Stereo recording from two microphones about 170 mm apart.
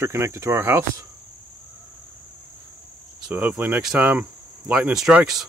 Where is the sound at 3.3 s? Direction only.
10° right (ahead or behind).